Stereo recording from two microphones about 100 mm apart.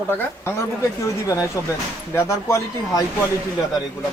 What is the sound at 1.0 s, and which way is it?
Speech, 35° left (ahead or behind).